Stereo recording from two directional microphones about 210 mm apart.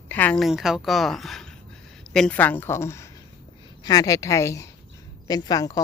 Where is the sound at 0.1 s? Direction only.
5° left (ahead or behind).